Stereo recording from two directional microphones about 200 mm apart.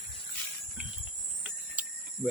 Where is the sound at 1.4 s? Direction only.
5° right (ahead or behind).